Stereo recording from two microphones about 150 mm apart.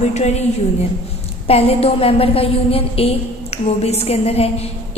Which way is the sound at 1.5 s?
40° left (ahead or behind).